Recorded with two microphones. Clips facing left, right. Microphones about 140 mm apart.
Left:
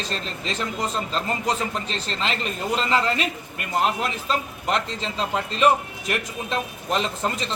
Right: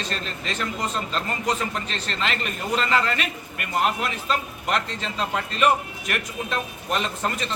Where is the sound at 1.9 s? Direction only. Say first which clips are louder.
Left 1 dB; 30° left (ahead or behind).